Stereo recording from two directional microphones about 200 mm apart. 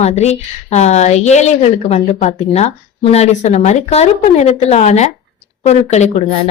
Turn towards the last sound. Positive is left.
turn(degrees=35)  # may be behind; listen again after turning